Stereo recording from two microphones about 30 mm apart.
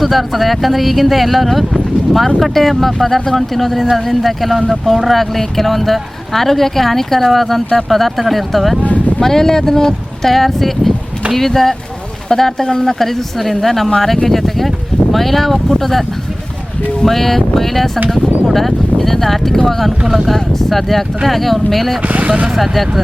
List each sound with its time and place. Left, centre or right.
0.0 s speech: centre
8.9 s speech: left
9.2 s speech: centre
10.3 s speech: centre
17.1 s speech: centre
22.0 s speech: right
22.5 s speech: centre